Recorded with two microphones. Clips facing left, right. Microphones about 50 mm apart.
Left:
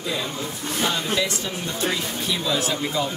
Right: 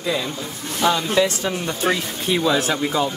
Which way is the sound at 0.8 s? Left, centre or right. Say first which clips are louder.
Right 6 dB; right.